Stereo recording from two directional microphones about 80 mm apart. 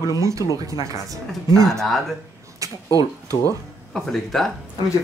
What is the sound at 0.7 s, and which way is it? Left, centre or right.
Speech, right.